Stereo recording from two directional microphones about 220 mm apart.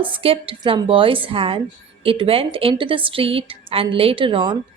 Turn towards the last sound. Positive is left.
turn(degrees=-20)  # may be behind; listen again after turning